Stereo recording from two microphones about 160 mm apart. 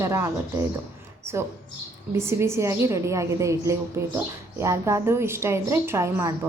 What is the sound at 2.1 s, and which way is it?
A woman's voice, 15° right (ahead or behind).